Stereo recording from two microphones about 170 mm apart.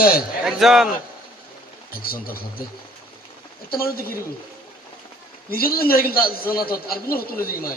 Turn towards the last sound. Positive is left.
turn(degrees=60)  # may be behind; listen again after turning